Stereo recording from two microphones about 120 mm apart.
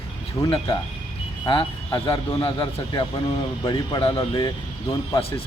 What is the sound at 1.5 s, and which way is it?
Speech, 40° left (ahead or behind).